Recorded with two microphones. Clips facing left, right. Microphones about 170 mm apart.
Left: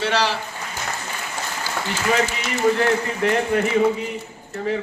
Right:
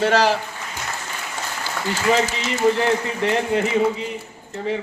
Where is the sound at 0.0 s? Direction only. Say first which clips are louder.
Right 4 dB; 45° right (ahead or behind).